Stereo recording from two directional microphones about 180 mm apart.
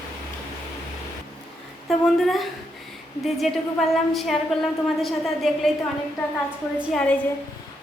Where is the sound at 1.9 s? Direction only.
Centre (ahead or behind).